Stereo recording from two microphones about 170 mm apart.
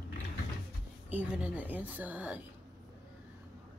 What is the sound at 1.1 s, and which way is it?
A woman's voice, 10° right (ahead or behind).